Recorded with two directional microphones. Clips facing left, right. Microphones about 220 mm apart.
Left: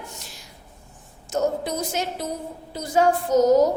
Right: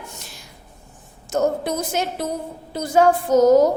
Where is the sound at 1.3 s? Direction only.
55° right (ahead or behind).